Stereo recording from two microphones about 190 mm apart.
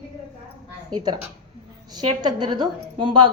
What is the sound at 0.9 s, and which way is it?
A woman's voice, 20° right (ahead or behind).